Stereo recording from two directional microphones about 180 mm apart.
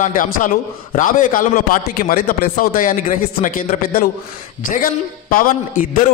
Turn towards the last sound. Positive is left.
turn(degrees=50)  # may be behind; listen again after turning